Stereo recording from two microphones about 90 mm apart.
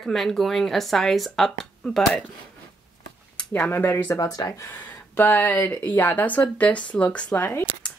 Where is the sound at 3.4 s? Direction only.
20° left (ahead or behind).